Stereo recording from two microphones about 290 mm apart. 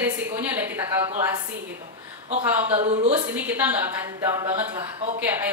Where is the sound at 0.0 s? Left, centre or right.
Centre.